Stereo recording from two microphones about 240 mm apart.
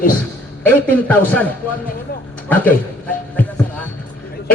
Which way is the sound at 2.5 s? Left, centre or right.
Centre.